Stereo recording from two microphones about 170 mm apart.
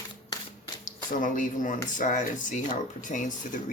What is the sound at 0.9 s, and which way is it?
Speech, 50° left (ahead or behind).